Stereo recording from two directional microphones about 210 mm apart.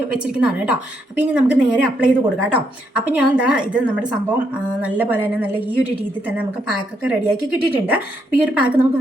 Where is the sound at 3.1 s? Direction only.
5° right (ahead or behind).